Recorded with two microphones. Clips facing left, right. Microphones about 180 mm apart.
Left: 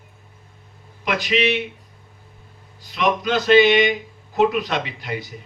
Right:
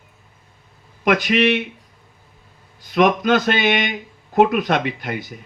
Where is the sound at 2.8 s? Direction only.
50° right (ahead or behind).